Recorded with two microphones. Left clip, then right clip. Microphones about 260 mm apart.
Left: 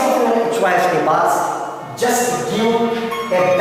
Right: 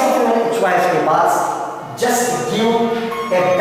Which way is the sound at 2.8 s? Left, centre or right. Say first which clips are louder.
Even; centre.